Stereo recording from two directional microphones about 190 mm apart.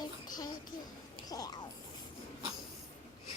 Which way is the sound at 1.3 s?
20° left (ahead or behind).